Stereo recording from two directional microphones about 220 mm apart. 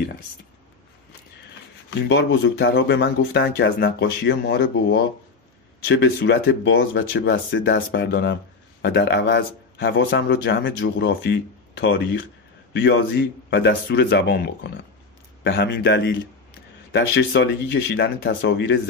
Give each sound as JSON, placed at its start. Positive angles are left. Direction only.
{"t": 2.0, "sound": "speech", "side_deg": 50}